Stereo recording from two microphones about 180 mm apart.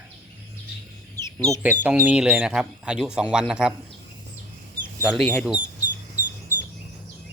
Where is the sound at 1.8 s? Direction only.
10° right (ahead or behind).